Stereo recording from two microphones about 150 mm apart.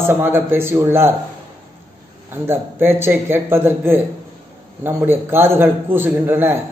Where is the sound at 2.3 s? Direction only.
15° right (ahead or behind).